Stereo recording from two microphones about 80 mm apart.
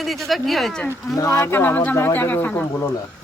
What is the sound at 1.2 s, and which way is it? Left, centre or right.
Speech, left.